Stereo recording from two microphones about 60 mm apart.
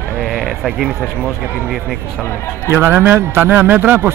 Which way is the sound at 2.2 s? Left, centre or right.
Left.